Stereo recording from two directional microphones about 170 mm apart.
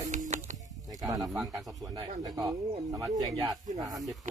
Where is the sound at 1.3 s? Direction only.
Centre (ahead or behind).